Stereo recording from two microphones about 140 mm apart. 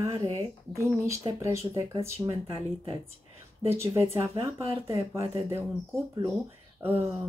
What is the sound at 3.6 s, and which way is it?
Speech, 20° right (ahead or behind).